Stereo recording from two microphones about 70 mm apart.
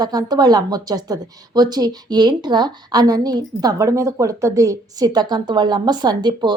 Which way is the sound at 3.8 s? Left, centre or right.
Right.